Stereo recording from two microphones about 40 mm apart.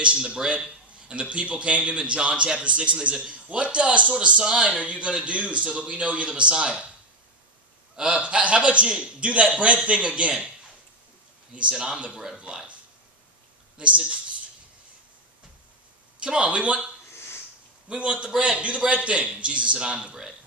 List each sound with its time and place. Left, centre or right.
0.3 s a man's voice: right
7.9 s a man's voice: right
11.7 s a man's voice: right
13.7 s a man's voice: right
16.2 s a man's voice: right
17.8 s a man's voice: right